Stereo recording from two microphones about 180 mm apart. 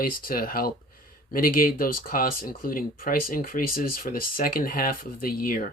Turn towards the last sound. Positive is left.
turn(degrees=55)  # may be behind; listen again after turning